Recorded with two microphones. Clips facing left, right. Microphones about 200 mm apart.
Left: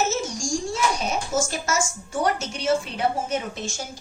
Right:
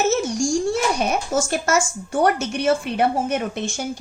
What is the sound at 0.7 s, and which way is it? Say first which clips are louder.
A child's voice: right 4 dB; 60° right (ahead or behind).